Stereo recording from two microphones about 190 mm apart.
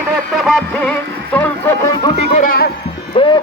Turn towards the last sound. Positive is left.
turn(degrees=30)  # may be behind; listen again after turning